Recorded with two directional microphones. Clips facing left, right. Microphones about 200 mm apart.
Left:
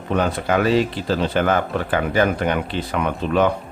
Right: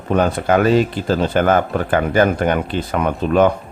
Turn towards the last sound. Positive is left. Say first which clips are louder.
# right 4 dB
turn(degrees=-45)  # may be behind; listen again after turning